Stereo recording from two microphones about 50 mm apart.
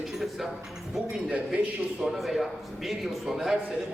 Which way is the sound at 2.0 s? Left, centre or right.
Centre.